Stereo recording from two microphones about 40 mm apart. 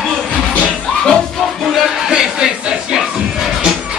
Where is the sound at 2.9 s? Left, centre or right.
Centre.